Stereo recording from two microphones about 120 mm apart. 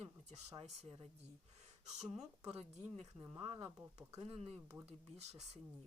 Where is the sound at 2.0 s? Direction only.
70° right (ahead or behind).